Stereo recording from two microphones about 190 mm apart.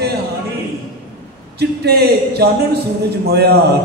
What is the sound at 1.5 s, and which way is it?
A man's voice, 55° right (ahead or behind).